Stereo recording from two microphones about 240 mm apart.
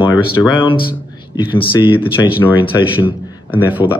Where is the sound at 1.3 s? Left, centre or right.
Left.